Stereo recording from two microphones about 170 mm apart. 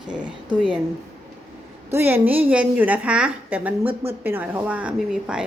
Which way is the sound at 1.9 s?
10° right (ahead or behind).